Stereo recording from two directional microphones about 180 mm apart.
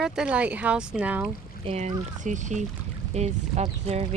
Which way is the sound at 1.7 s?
40° right (ahead or behind).